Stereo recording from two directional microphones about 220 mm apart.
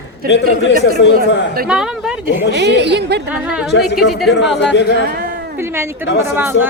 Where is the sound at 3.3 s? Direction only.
5° right (ahead or behind).